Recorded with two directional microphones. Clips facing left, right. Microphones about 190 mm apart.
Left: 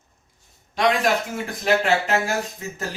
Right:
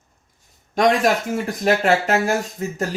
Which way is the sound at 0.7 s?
45° right (ahead or behind).